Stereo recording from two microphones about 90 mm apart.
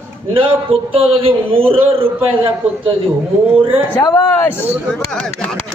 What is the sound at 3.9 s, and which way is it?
Speech, 45° left (ahead or behind).